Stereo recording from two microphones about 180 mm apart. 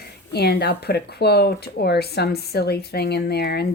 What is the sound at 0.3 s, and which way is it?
Speech, 60° left (ahead or behind).